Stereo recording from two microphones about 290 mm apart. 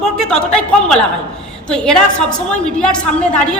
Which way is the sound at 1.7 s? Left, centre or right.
Centre.